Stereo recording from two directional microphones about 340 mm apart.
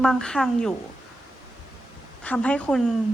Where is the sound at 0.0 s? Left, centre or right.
Centre.